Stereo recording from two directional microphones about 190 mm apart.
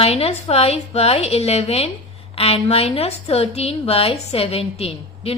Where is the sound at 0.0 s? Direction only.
35° left (ahead or behind).